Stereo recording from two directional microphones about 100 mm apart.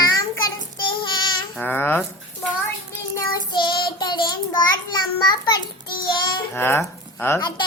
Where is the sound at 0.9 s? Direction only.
50° left (ahead or behind).